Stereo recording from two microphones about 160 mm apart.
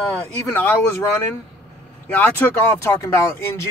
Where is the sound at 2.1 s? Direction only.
15° left (ahead or behind).